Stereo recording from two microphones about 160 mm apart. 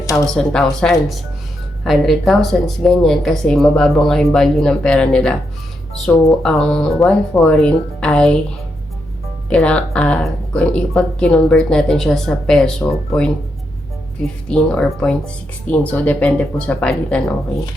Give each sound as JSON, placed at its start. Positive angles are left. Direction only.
{"t": 0.3, "sound": "speech", "side_deg": 5}
{"t": 9.5, "sound": "speech", "side_deg": 5}
{"t": 14.5, "sound": "speech", "side_deg": 5}